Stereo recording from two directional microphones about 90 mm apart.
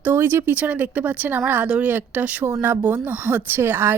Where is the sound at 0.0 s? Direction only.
20° right (ahead or behind).